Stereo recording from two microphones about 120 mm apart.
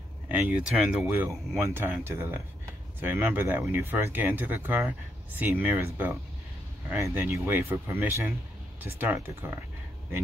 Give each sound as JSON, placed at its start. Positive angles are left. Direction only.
{"t": 0.3, "sound": "speech", "side_deg": -15}
{"t": 7.0, "sound": "speech", "side_deg": -20}